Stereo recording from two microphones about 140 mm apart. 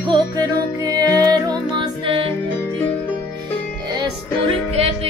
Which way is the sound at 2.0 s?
40° right (ahead or behind).